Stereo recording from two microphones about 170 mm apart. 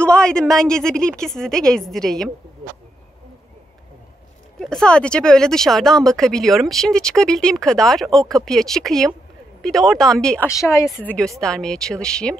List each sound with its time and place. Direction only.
0.0 s speech: 5° left (ahead or behind)
4.6 s speech: 5° left (ahead or behind)
10.5 s speech: 20° left (ahead or behind)
11.0 s speech: 5° left (ahead or behind)